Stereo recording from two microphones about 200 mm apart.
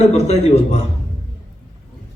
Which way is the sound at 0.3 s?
35° left (ahead or behind).